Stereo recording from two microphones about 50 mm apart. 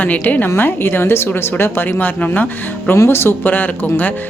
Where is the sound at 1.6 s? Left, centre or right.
Left.